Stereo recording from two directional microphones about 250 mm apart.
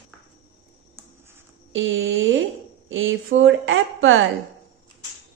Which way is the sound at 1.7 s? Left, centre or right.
Right.